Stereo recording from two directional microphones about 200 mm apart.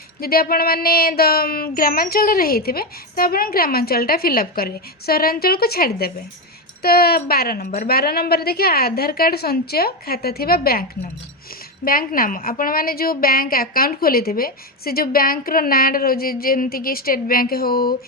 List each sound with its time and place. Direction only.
0.2 s a woman's voice: 50° left (ahead or behind)
11.9 s a woman's voice: 45° left (ahead or behind)